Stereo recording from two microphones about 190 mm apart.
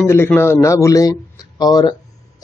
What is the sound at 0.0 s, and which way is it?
Speech, 10° left (ahead or behind).